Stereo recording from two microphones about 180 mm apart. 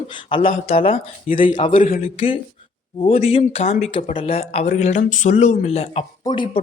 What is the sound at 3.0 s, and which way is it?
Speech, 35° left (ahead or behind).